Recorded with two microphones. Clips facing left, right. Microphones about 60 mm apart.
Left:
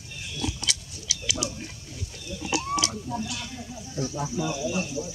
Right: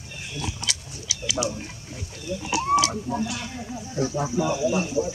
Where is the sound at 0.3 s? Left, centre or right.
Right.